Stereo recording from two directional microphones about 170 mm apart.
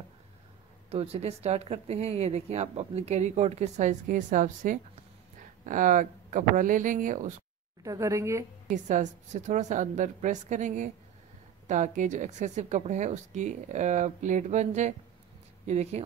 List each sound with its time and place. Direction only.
0.8 s speech: 35° right (ahead or behind)
7.8 s a woman's voice: 20° right (ahead or behind)
8.6 s speech: 45° right (ahead or behind)